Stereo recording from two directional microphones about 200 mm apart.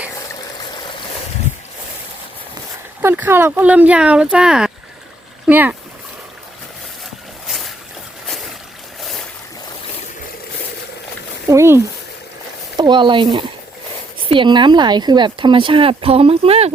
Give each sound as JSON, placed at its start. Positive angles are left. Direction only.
{"t": 3.0, "sound": "speech", "side_deg": -10}
{"t": 5.5, "sound": "splash", "side_deg": -10}
{"t": 7.4, "sound": "boat", "side_deg": 0}
{"t": 11.4, "sound": "a sound", "side_deg": -15}
{"t": 14.3, "sound": "speech", "side_deg": -25}